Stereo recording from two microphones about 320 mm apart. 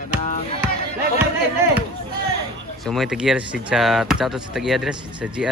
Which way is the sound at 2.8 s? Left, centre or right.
Centre.